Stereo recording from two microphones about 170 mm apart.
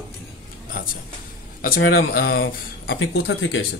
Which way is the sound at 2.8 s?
90° left.